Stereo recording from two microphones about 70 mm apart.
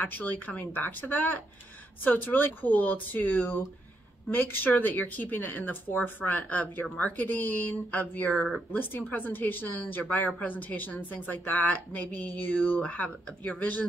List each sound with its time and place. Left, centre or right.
0.0 s speech: left